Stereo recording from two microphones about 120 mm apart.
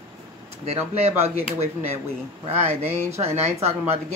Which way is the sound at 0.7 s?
60° right (ahead or behind).